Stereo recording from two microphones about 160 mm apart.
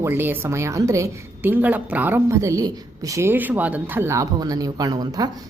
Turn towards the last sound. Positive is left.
turn(degrees=-25)  # may be behind; listen again after turning